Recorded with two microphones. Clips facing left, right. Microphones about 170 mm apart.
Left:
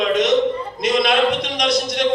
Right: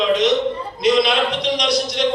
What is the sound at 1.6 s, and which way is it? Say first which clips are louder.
Speech: left 1 dB; 50° left (ahead or behind).